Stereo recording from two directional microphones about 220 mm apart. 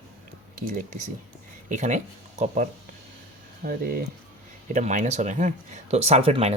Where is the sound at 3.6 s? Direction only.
40° right (ahead or behind).